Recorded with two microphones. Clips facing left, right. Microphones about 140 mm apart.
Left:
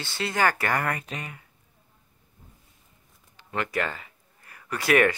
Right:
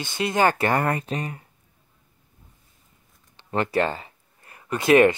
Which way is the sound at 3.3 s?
30° right (ahead or behind).